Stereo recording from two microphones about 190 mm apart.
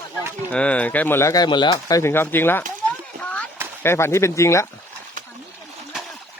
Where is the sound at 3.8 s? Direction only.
15° left (ahead or behind).